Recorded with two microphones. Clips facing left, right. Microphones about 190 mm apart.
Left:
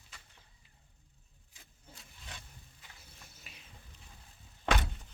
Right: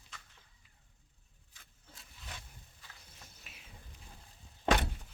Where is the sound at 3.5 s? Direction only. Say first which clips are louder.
Left 1 dB; centre (ahead or behind).